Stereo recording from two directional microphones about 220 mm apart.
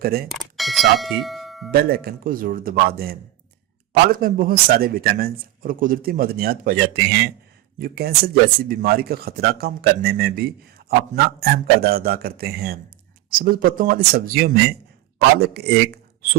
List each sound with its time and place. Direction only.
0.0 s a man's voice: 45° right (ahead or behind)
0.3 s speech: centre (ahead or behind)
1.7 s a man's voice: 45° right (ahead or behind)